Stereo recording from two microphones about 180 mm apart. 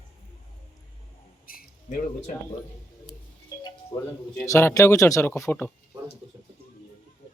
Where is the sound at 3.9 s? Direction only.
25° left (ahead or behind).